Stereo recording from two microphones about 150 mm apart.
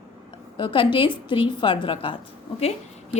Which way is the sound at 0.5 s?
35° left (ahead or behind).